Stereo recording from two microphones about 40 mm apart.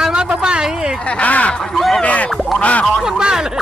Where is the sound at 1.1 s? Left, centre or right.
Left.